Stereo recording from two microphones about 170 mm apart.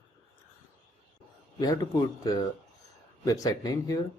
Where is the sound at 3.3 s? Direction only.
20° left (ahead or behind).